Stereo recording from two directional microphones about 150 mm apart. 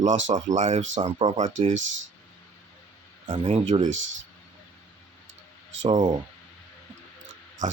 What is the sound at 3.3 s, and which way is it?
Speech, 40° right (ahead or behind).